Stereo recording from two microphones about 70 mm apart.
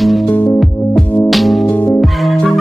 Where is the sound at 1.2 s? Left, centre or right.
Centre.